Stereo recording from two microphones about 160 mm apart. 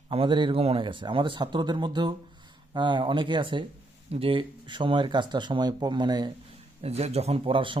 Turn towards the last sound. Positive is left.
turn(degrees=-30)  # may be behind; listen again after turning